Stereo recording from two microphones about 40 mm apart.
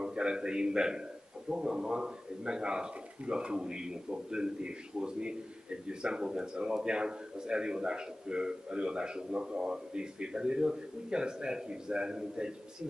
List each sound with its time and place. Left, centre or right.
0.0 s speech: right